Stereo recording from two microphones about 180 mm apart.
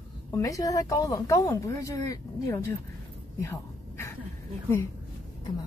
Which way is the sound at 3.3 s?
15° left (ahead or behind).